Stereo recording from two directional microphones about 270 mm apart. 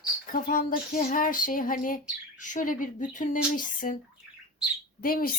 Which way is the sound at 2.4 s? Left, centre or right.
Left.